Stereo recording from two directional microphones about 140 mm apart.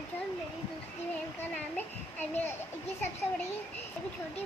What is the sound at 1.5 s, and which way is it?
A child's voice, 10° left (ahead or behind).